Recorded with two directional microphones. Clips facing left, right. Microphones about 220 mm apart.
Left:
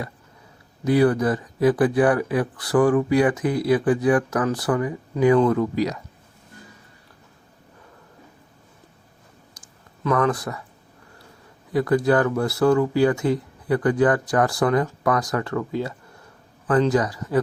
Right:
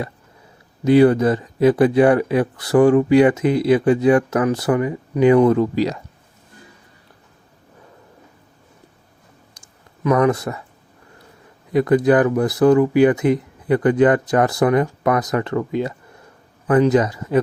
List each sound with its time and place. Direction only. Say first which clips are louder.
0.9 s speech: right 5 dB; 25° right (ahead or behind)
10.0 s speech: right 5 dB; 15° right (ahead or behind)
11.7 s speech: right 4 dB; 20° right (ahead or behind)